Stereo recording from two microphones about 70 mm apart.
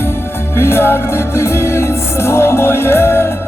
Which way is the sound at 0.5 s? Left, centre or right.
Left.